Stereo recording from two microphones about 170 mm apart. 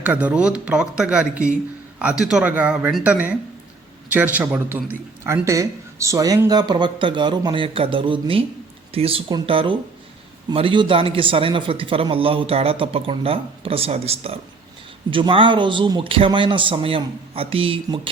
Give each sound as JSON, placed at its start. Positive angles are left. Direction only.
{"t": 0.0, "sound": "speech", "side_deg": -10}